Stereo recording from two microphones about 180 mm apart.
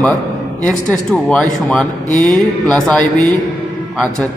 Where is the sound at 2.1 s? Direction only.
20° right (ahead or behind).